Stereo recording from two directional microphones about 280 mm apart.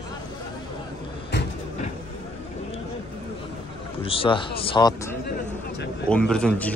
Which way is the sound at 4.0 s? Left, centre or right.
Centre.